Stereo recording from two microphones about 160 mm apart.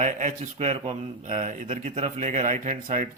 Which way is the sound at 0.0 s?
50° right (ahead or behind).